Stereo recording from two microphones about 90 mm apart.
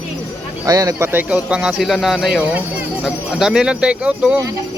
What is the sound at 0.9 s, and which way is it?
Speech, 25° right (ahead or behind).